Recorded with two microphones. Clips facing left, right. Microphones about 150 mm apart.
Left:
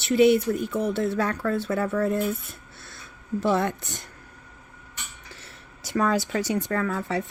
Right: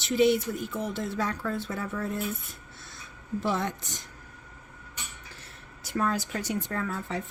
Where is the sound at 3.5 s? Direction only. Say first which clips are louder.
Left 6 dB; 60° left (ahead or behind).